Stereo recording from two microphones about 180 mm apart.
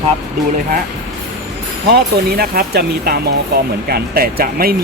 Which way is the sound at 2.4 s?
60° right (ahead or behind).